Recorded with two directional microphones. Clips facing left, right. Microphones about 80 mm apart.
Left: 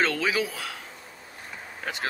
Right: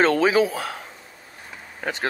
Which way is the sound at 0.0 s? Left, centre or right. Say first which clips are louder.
Right 8 dB; right.